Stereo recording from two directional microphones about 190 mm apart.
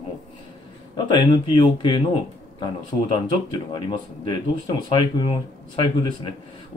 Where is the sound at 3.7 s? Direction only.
25° left (ahead or behind).